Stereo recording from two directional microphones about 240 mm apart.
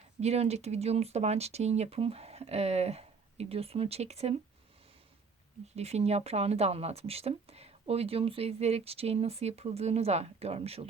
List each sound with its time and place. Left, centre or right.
0.2 s speech: right
5.7 s speech: right